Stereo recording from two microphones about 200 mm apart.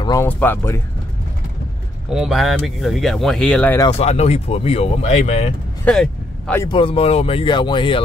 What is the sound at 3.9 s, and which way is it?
Speech, 30° left (ahead or behind).